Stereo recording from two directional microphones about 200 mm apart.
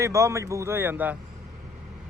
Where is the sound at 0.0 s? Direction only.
15° right (ahead or behind).